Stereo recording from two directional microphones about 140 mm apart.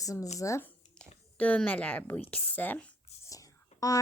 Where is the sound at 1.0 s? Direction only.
10° left (ahead or behind).